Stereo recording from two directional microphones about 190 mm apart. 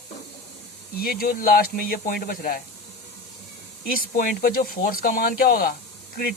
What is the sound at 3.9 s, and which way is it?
Speech, 50° left (ahead or behind).